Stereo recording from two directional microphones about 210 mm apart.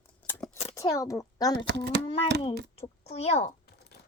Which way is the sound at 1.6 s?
55° right (ahead or behind).